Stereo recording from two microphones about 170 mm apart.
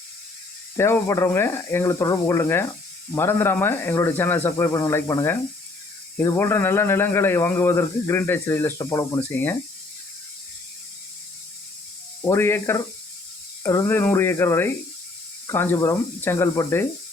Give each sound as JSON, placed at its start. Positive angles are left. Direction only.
{"t": 0.8, "sound": "speech", "side_deg": 15}
{"t": 12.2, "sound": "speech", "side_deg": 15}